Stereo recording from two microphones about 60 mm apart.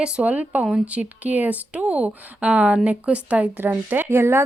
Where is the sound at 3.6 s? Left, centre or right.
Right.